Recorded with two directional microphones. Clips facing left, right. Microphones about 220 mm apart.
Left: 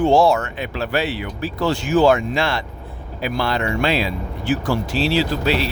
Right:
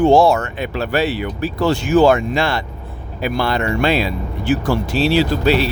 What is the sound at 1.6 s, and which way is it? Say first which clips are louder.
Speech: right 3 dB; 70° right (ahead or behind).